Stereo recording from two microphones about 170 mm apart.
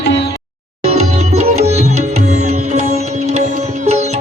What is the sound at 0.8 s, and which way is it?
Music, 40° right (ahead or behind).